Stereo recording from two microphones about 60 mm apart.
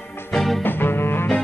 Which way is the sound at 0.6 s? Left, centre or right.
Left.